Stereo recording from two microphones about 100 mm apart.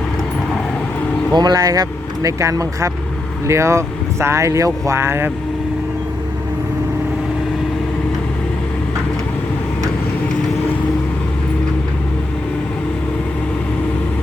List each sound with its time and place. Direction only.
1.3 s speech: 45° right (ahead or behind); by 5.3 s 25° right (ahead or behind)